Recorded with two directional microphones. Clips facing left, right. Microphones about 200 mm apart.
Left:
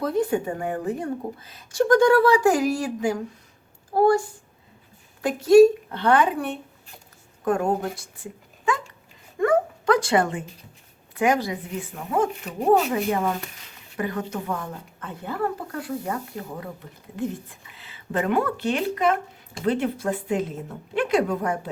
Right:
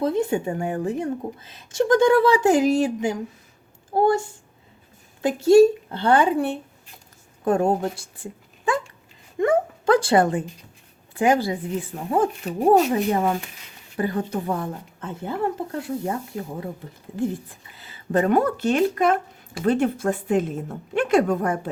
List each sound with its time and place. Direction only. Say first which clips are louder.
0.0 s speech: right 1 dB; 25° right (ahead or behind)
5.2 s speech: even; 25° right (ahead or behind)
9.4 s a sound: even; 25° right (ahead or behind)
11.1 s a woman's voice: right 2 dB; 30° right (ahead or behind)
17.7 s a woman's voice: right 7 dB; 40° right (ahead or behind)